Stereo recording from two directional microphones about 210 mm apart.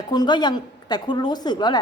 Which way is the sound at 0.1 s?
20° left (ahead or behind).